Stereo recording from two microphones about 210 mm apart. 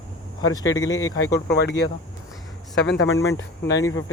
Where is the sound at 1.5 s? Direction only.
55° left (ahead or behind).